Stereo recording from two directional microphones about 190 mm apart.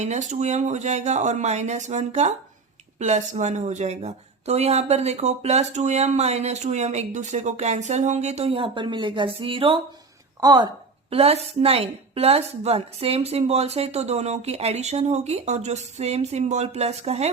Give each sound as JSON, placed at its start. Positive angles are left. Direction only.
{"t": 0.0, "sound": "a woman's voice", "side_deg": -40}
{"t": 11.1, "sound": "a woman's voice", "side_deg": -30}